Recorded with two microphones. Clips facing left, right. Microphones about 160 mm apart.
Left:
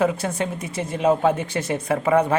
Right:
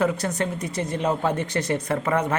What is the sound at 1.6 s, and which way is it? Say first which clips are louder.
Speech: even; 25° left (ahead or behind).